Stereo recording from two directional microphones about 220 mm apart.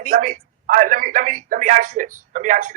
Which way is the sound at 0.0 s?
35° right (ahead or behind).